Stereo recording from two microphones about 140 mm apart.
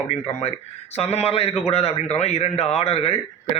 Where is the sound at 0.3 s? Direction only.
50° left (ahead or behind).